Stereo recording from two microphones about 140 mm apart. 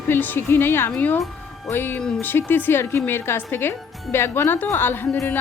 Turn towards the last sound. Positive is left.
turn(degrees=15)  # may be behind; listen again after turning